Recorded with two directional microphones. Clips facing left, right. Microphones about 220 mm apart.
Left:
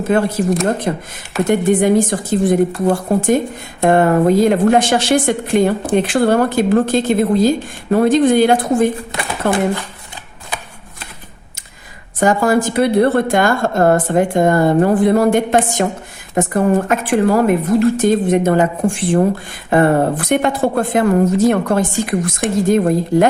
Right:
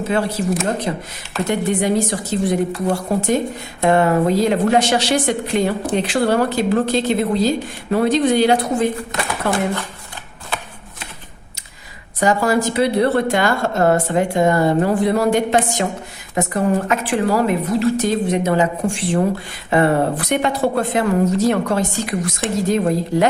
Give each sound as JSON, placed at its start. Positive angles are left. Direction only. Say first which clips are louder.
{"t": 0.1, "sound": "a woman's voice", "louder": "left 5 dB", "side_deg": 50}
{"t": 12.2, "sound": "a woman's voice", "louder": "left 3 dB", "side_deg": 50}